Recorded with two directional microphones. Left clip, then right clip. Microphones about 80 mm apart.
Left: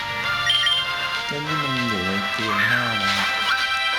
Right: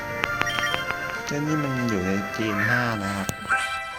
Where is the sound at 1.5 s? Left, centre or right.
Left.